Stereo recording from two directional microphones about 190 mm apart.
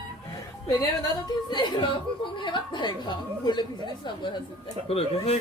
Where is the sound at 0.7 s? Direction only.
20° left (ahead or behind).